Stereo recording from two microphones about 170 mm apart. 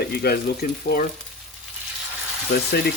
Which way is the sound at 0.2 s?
65° left (ahead or behind).